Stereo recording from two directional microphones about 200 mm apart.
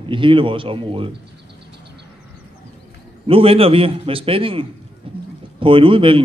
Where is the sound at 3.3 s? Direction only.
30° right (ahead or behind).